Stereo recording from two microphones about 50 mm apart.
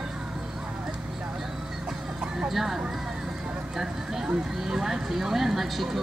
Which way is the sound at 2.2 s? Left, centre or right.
Centre.